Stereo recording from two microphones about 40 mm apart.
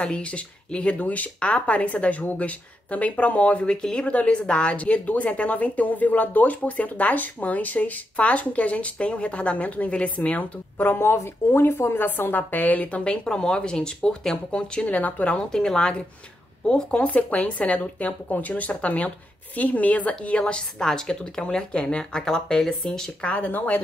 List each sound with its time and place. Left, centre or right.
0.0 s a woman's voice: left
0.9 s speech: left
10.8 s speech: left
13.3 s a woman's voice: left
14.8 s speech: left
15.3 s a woman's voice: centre
17.0 s speech: left
20.2 s a woman's voice: left; by 23.1 s centre
23.2 s speech: left